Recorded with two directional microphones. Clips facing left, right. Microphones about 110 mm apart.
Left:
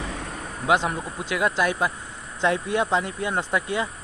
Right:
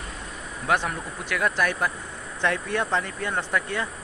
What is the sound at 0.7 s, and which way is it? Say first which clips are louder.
Speech: left 3 dB; 20° left (ahead or behind).